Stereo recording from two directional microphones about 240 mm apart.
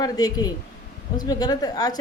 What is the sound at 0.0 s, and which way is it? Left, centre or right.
A woman's voice, centre.